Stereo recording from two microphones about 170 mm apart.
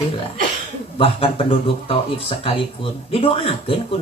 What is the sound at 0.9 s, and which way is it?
Speech, 35° left (ahead or behind).